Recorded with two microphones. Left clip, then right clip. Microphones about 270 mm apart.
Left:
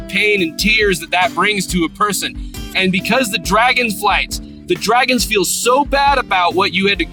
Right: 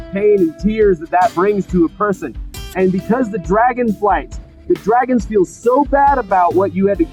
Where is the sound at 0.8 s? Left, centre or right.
Left.